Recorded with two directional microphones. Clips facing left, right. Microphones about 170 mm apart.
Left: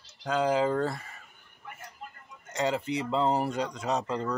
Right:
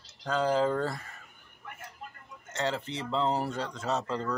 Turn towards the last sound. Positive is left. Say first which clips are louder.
# left 1 dB
turn(degrees=10)  # may be behind; listen again after turning